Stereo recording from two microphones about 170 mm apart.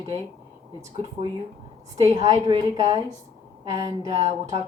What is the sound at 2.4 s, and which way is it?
Speech, 25° right (ahead or behind).